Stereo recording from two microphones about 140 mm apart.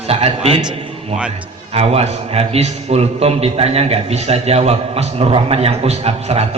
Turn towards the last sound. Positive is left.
turn(degrees=-45)  # may be behind; listen again after turning